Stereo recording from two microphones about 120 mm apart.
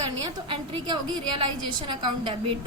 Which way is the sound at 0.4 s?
40° right (ahead or behind).